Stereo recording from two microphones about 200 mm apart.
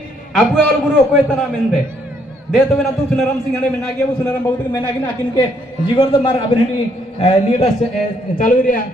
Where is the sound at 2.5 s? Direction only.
Centre (ahead or behind).